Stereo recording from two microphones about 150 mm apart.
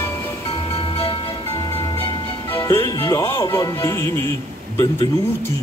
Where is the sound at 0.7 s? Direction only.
40° left (ahead or behind).